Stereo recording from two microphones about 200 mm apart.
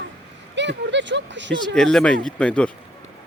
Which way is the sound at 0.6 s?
60° right (ahead or behind).